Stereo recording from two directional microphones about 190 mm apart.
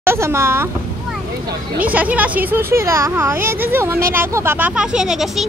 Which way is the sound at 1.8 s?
10° right (ahead or behind).